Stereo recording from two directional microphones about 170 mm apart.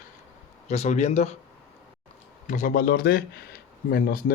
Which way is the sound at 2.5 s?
50° left (ahead or behind).